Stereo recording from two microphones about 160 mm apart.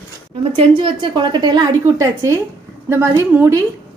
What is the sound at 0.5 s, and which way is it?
A woman's voice, 35° right (ahead or behind).